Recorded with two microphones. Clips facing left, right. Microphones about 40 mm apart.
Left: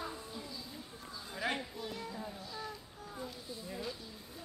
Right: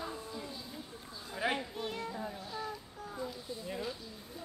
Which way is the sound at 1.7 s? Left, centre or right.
Right.